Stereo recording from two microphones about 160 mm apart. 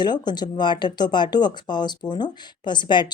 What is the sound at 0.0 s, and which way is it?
Speech, 25° left (ahead or behind).